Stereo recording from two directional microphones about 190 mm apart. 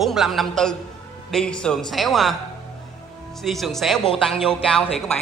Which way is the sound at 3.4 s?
Centre (ahead or behind).